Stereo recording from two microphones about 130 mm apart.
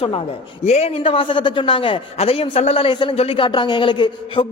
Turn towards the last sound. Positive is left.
turn(degrees=40)  # may be behind; listen again after turning